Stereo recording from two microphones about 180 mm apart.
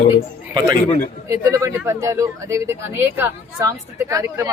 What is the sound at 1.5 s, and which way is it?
Speech, 15° right (ahead or behind).